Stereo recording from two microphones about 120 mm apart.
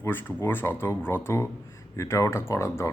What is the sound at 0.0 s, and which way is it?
A man's voice, 15° left (ahead or behind).